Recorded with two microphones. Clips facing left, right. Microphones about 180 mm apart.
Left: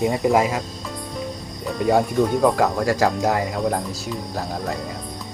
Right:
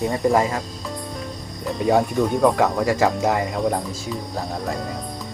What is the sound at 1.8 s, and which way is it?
Speech, centre (ahead or behind).